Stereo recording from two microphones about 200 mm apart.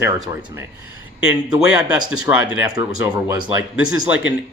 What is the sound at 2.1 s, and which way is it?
Speech, 20° right (ahead or behind).